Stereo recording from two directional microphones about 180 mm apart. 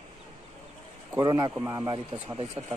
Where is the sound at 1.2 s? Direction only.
20° right (ahead or behind).